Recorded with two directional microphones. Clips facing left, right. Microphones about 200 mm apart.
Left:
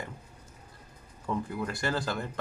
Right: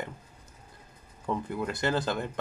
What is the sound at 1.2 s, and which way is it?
Speech, 20° right (ahead or behind).